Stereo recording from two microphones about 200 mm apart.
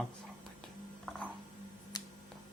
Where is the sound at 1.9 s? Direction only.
20° left (ahead or behind).